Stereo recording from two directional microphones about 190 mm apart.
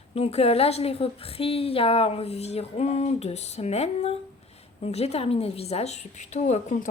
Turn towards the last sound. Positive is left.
turn(degrees=40)  # may be behind; listen again after turning